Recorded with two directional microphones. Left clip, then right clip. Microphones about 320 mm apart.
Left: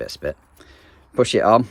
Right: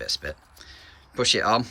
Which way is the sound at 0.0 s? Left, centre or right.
Centre.